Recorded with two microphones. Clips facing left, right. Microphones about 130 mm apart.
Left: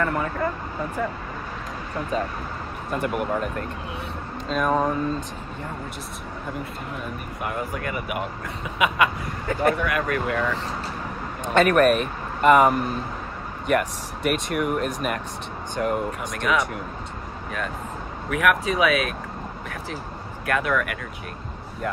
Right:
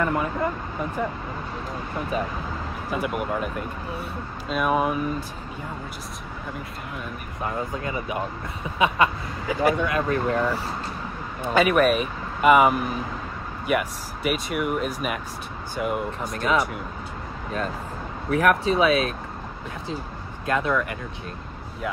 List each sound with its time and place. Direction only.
0.0 s speech: 15° right (ahead or behind)
2.1 s speech: 10° right (ahead or behind)
7.4 s speech: 25° right (ahead or behind)
9.5 s speech: 5° right (ahead or behind)
9.8 s speech: 25° right (ahead or behind)
11.4 s speech: 5° right (ahead or behind)
16.2 s speech: 30° right (ahead or behind)
18.3 s speech: 35° right (ahead or behind)
20.4 s speech: 20° right (ahead or behind)